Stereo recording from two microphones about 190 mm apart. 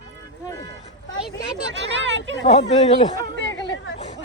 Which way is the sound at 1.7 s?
70° right (ahead or behind).